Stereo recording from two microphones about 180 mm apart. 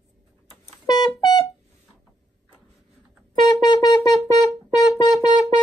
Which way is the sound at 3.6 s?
20° left (ahead or behind).